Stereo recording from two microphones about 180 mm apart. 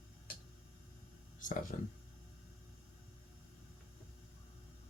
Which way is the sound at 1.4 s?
45° left (ahead or behind).